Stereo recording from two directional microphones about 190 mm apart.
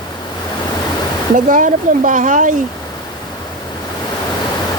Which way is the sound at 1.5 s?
45° right (ahead or behind).